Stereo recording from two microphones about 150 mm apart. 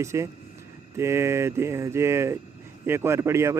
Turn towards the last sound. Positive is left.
turn(degrees=-15)  # may be behind; listen again after turning